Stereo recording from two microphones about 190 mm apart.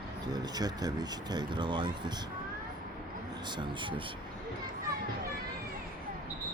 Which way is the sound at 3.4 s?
25° right (ahead or behind).